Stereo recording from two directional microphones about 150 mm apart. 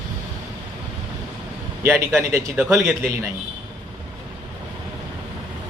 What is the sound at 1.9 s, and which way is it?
A man's voice, 15° right (ahead or behind).